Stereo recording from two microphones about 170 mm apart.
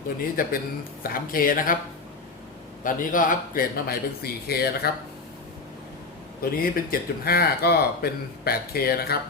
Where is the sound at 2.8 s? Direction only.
50° left (ahead or behind).